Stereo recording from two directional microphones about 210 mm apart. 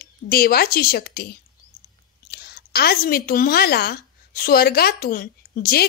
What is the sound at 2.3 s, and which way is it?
A woman's voice, 50° left (ahead or behind).